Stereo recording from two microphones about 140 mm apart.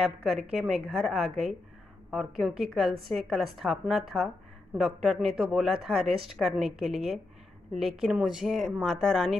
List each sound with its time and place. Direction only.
0.2 s a woman's voice: centre (ahead or behind)